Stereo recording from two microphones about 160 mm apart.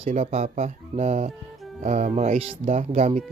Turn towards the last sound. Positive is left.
turn(degrees=-40)  # may be behind; listen again after turning